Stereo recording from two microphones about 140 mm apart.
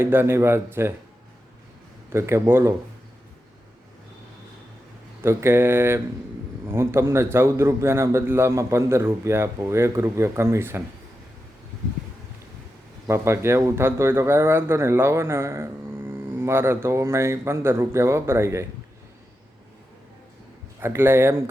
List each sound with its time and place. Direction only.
0.0 s speech: 15° right (ahead or behind)
2.0 s speech: 20° right (ahead or behind)
5.2 s speech: 20° right (ahead or behind)
13.1 s speech: 20° right (ahead or behind)
20.8 s speech: 15° right (ahead or behind)